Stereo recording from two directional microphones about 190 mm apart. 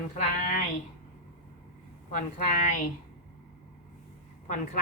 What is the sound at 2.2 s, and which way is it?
Speech, 40° left (ahead or behind).